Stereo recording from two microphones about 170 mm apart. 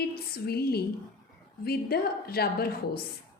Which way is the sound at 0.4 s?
65° left (ahead or behind).